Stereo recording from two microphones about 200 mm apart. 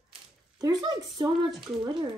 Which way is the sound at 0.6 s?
20° right (ahead or behind).